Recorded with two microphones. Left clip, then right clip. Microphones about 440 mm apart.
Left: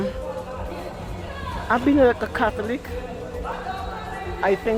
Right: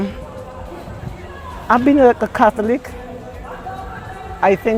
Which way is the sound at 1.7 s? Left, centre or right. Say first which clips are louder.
Right 6 dB; right.